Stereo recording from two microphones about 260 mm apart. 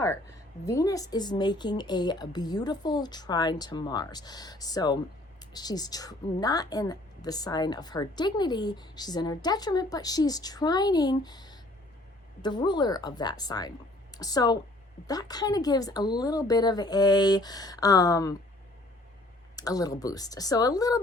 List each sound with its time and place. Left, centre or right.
0.6 s a woman's voice: centre
19.5 s a woman's voice: centre